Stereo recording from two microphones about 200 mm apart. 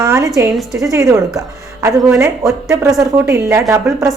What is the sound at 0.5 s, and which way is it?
Speech, centre (ahead or behind).